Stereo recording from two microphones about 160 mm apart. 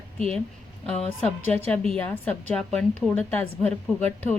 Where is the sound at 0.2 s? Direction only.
5° left (ahead or behind).